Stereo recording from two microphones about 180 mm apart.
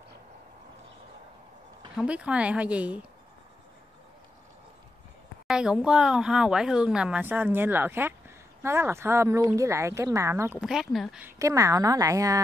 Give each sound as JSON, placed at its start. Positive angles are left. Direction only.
{"t": 2.0, "sound": "speech", "side_deg": -5}
{"t": 5.5, "sound": "speech", "side_deg": -5}
{"t": 10.6, "sound": "speech", "side_deg": 0}